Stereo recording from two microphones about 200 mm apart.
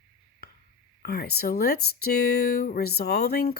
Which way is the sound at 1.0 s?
50° left (ahead or behind).